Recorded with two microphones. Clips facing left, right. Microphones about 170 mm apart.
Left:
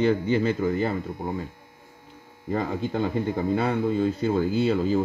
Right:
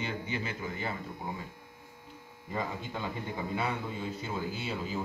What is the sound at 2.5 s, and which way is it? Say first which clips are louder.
A man's voice: left 10 dB; 65° left (ahead or behind).